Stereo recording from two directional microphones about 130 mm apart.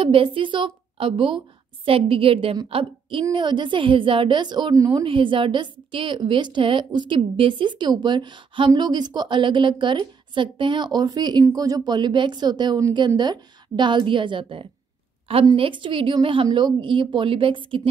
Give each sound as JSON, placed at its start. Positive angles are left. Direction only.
{"t": 0.0, "sound": "a woman's voice", "side_deg": -45}
{"t": 5.0, "sound": "a woman's voice", "side_deg": -40}